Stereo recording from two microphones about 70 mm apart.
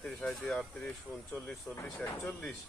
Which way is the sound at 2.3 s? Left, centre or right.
Centre.